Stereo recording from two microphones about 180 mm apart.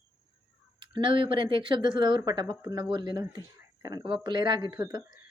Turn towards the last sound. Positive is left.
turn(degrees=-20)  # may be behind; listen again after turning